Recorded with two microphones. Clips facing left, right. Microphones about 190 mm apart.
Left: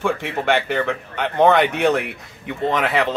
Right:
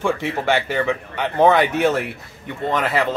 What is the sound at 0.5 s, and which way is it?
Speech, 10° right (ahead or behind).